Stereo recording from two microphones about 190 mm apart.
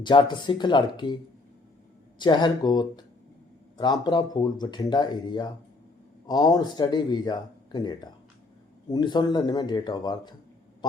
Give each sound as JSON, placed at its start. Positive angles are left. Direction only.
{"t": 0.0, "sound": "speech", "side_deg": 25}